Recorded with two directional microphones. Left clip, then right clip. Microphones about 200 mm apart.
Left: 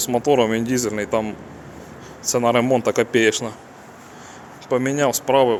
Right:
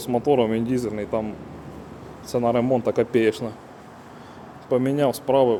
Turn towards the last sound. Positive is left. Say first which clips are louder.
# left 2 dB
turn(degrees=-10)  # may be behind; listen again after turning